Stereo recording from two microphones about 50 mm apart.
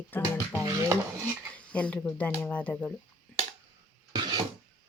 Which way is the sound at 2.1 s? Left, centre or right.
Left.